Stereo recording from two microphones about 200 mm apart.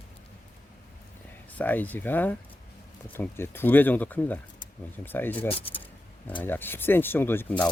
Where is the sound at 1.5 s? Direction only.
10° left (ahead or behind).